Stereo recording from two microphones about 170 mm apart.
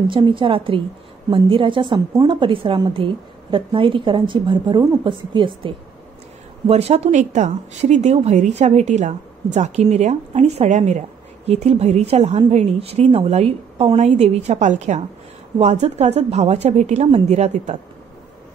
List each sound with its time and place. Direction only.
0.1 s a woman's voice: 30° right (ahead or behind)